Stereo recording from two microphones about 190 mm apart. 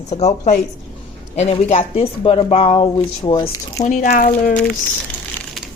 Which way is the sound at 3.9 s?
40° left (ahead or behind).